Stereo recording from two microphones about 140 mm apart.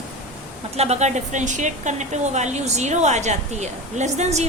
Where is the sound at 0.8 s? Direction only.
55° right (ahead or behind).